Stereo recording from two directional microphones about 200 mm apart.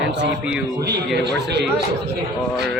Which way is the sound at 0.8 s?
55° right (ahead or behind).